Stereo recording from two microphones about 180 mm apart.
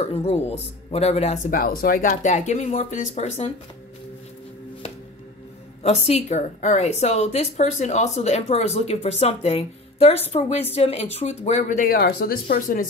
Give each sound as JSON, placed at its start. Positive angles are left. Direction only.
{"t": 0.0, "sound": "speech", "side_deg": 35}
{"t": 5.8, "sound": "speech", "side_deg": 35}